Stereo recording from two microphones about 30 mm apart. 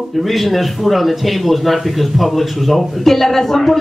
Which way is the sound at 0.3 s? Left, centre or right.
Centre.